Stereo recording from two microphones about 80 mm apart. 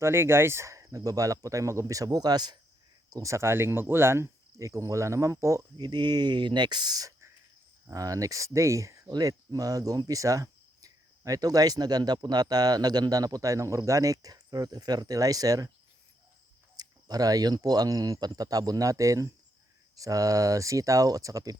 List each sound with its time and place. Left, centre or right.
0.0 s speech: right
3.1 s speech: right
5.7 s speech: right
7.9 s speech: right
16.7 s speech: right